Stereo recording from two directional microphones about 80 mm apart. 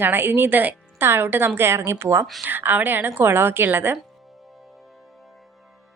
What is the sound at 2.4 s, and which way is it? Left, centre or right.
A woman's voice, right.